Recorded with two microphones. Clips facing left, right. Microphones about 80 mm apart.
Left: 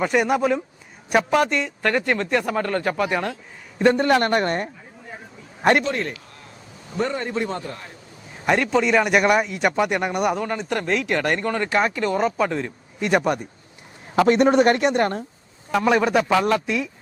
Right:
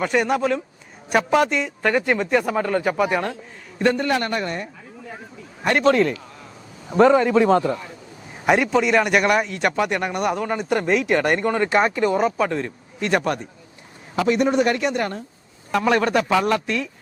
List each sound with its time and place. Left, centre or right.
0.0 s speech: centre
4.0 s speech: left
6.9 s a man's voice: right
8.4 s speech: centre
14.2 s speech: left
15.7 s speech: centre